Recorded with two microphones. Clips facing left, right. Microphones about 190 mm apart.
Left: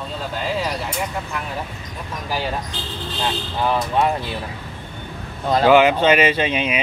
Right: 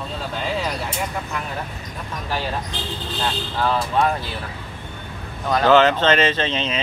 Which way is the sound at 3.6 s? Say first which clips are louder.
Left 1 dB; 15° left (ahead or behind).